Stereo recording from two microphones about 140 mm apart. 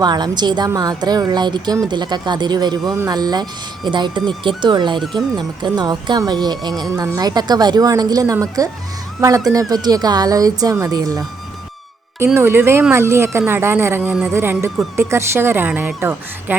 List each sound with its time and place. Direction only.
0.0 s a woman's voice: 30° right (ahead or behind)
12.2 s a woman's voice: 15° right (ahead or behind)
14.3 s a woman's voice: 15° right (ahead or behind)